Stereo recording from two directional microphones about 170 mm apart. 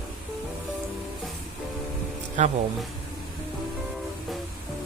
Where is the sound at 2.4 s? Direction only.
45° right (ahead or behind).